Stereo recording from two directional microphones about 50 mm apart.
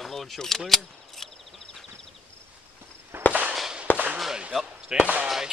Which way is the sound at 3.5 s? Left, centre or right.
Centre.